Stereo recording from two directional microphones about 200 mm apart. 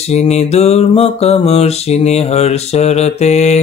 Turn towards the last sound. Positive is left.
turn(degrees=35)  # may be behind; listen again after turning